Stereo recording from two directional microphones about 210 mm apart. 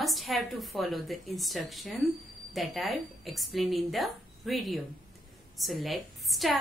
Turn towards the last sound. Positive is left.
turn(degrees=0)  # may be behind; listen again after turning